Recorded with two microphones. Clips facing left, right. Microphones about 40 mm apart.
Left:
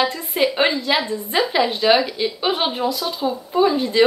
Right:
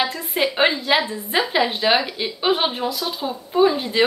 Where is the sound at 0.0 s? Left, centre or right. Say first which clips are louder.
Left 2 dB; centre.